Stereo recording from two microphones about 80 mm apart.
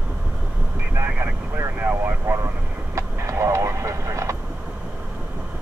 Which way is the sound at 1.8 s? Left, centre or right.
Right.